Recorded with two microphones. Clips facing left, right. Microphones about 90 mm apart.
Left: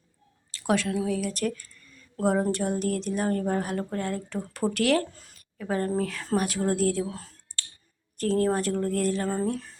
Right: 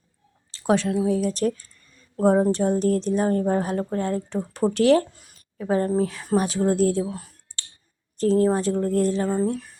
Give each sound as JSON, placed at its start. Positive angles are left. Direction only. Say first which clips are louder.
{"t": 0.5, "sound": "a woman's voice", "louder": "right 4 dB", "side_deg": -30}
{"t": 5.1, "sound": "a sound", "louder": "right 5 dB", "side_deg": -20}
{"t": 6.0, "sound": "a woman's voice", "louder": "right 4 dB", "side_deg": -20}
{"t": 7.0, "sound": "speech", "louder": "right 3 dB", "side_deg": -15}
{"t": 8.2, "sound": "a woman's voice", "louder": "right 5 dB", "side_deg": -25}